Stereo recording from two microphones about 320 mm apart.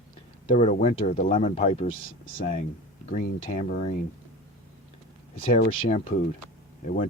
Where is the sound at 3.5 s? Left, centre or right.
Left.